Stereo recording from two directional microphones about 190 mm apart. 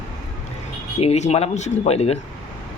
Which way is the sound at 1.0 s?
35° left (ahead or behind).